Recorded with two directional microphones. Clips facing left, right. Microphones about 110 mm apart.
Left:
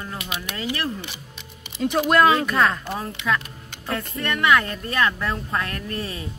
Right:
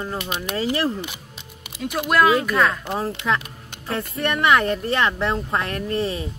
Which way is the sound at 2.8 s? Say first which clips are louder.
Right 4 dB; 25° right (ahead or behind).